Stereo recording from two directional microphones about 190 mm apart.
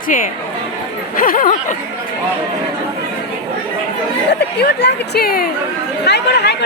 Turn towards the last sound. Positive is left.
turn(degrees=60)  # may be behind; listen again after turning